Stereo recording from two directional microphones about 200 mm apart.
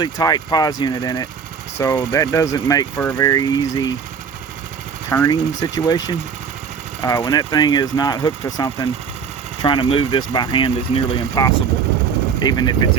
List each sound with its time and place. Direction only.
0.0 s speech: 20° left (ahead or behind)
5.1 s speech: 15° left (ahead or behind)